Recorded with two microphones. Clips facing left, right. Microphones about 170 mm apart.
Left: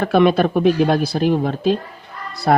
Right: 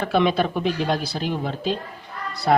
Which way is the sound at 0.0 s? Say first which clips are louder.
Left 6 dB; 50° left (ahead or behind).